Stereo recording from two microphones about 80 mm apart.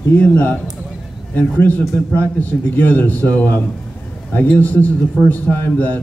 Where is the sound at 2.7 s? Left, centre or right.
Left.